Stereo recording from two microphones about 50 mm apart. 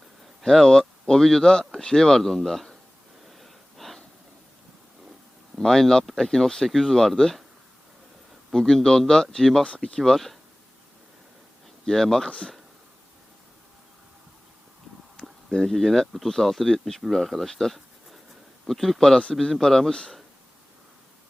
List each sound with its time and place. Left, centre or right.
0.4 s speech: centre
3.2 s a sound: centre
5.5 s speech: centre
8.5 s speech: centre
9.6 s speech: centre
10.0 s speech: centre
11.9 s speech: centre
15.4 s speech: centre